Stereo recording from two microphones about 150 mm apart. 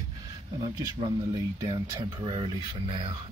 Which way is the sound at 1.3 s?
25° right (ahead or behind).